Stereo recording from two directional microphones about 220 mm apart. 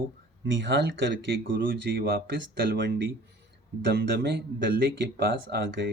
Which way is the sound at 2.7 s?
45° right (ahead or behind).